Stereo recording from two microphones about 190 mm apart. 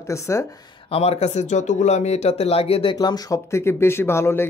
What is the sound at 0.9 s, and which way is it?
Speech, 30° left (ahead or behind).